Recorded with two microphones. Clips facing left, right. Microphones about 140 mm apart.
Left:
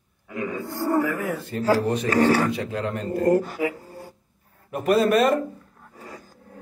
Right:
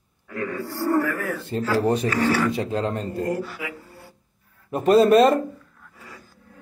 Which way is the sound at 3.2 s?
50° left (ahead or behind).